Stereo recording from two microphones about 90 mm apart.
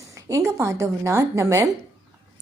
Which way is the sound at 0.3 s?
40° right (ahead or behind).